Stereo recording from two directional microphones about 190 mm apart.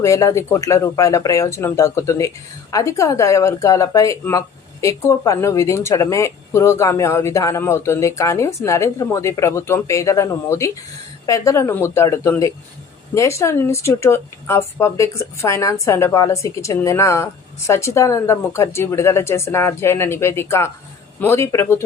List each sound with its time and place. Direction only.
0.0 s speech: 15° left (ahead or behind)